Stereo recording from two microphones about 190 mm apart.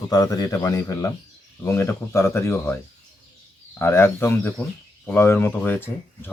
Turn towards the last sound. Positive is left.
turn(degrees=10)  # may be behind; listen again after turning